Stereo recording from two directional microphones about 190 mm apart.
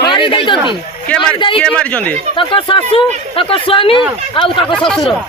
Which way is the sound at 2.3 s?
25° left (ahead or behind).